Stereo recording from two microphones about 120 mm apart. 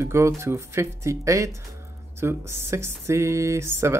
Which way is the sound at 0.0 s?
25° right (ahead or behind).